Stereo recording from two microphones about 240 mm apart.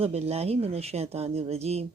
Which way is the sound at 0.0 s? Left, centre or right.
Right.